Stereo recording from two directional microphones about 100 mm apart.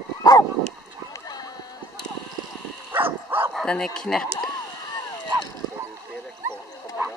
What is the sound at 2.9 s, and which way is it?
Dog, 20° right (ahead or behind).